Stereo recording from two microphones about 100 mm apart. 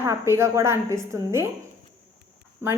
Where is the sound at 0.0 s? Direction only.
25° right (ahead or behind).